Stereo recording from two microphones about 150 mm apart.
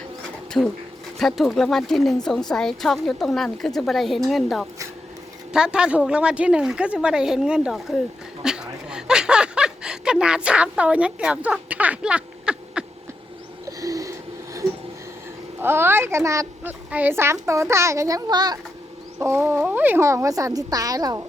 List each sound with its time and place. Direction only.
0.6 s a woman's voice: 5° left (ahead or behind)
13.7 s a sound: 20° right (ahead or behind)
15.6 s a woman's voice: 15° right (ahead or behind)
19.2 s a woman's voice: 15° right (ahead or behind)